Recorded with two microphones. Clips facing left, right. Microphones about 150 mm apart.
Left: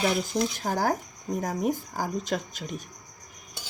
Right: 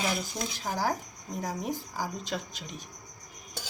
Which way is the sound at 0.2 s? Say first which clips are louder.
Left 8 dB; 50° left (ahead or behind).